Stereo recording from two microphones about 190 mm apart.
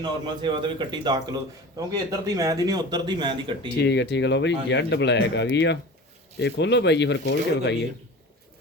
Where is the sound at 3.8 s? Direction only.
65° left (ahead or behind).